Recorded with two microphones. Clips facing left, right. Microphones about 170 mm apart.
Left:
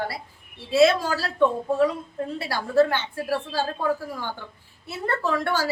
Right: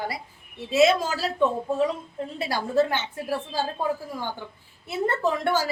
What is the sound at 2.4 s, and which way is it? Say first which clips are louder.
A woman's voice: left 2 dB; 20° right (ahead or behind).